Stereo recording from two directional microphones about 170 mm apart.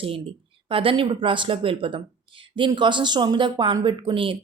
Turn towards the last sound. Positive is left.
turn(degrees=-30)  # may be behind; listen again after turning